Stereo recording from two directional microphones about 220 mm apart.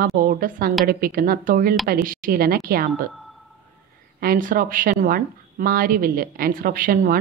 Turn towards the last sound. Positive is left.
turn(degrees=-40)  # may be behind; listen again after turning